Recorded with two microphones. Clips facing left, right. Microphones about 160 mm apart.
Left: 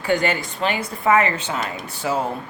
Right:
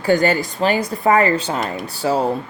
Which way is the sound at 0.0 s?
40° right (ahead or behind).